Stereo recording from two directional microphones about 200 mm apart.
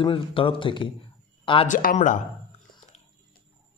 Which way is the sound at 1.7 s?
40° left (ahead or behind).